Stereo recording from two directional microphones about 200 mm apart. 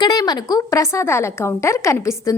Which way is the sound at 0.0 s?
20° left (ahead or behind).